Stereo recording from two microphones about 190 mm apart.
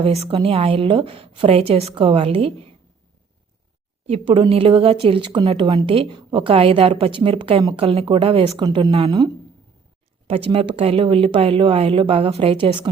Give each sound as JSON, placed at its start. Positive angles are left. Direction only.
{"t": 0.0, "sound": "a woman's voice", "side_deg": -30}
{"t": 4.0, "sound": "a woman's voice", "side_deg": -30}